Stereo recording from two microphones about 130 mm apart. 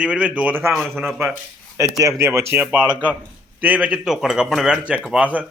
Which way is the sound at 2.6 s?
10° right (ahead or behind).